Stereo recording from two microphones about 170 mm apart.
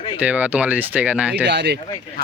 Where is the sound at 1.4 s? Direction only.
85° right.